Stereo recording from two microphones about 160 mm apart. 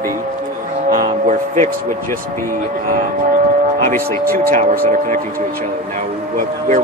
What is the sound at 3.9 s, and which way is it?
Speech, 65° right (ahead or behind).